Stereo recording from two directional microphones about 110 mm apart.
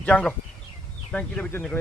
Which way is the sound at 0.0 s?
10° left (ahead or behind).